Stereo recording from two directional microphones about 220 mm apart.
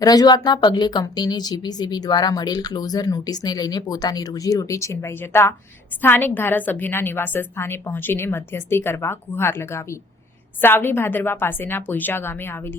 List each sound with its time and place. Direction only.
0.0 s a woman's voice: 15° left (ahead or behind)